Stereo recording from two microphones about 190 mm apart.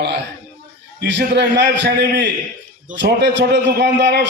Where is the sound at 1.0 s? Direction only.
65° right (ahead or behind).